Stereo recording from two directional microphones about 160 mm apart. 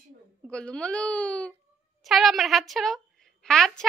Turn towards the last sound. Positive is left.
turn(degrees=5)  # may be behind; listen again after turning